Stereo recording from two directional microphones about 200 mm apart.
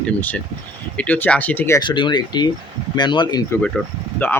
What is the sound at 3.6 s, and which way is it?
Speech, 5° left (ahead or behind).